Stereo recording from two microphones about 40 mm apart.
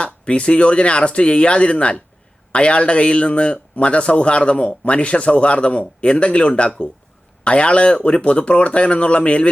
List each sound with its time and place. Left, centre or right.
0.0 s a man's voice: left